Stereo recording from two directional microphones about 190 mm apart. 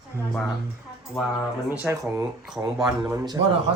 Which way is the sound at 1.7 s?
5° right (ahead or behind).